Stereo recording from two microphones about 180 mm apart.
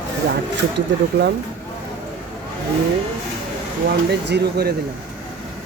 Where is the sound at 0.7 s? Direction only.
65° right (ahead or behind).